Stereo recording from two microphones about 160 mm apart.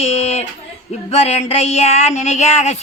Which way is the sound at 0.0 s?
40° left (ahead or behind).